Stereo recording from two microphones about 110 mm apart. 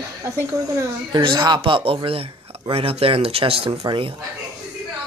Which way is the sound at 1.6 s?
55° right (ahead or behind).